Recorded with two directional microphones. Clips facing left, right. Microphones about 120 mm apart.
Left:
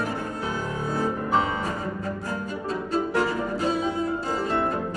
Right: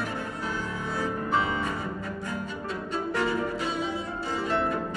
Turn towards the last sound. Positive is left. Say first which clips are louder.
# left 2 dB
turn(degrees=35)  # may be behind; listen again after turning